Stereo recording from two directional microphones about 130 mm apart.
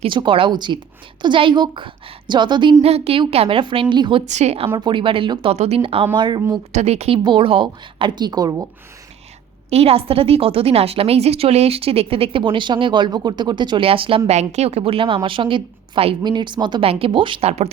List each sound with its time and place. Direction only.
0.0 s a woman's voice: 40° right (ahead or behind)
2.8 s a woman's voice: 50° right (ahead or behind)
4.3 s a woman's voice: 60° right (ahead or behind)
4.8 s a woman's voice: 40° right (ahead or behind)
5.5 s a woman's voice: 50° right (ahead or behind); by 6.4 s 35° right (ahead or behind)
6.7 s a woman's voice: 55° right (ahead or behind)
7.3 s a woman's voice: 40° right (ahead or behind)
9.6 s a woman's voice: 50° right (ahead or behind)
14.3 s a woman's voice: 55° right (ahead or behind)